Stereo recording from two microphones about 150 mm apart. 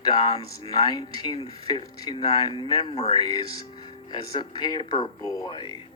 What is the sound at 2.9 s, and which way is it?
Speech, 40° left (ahead or behind).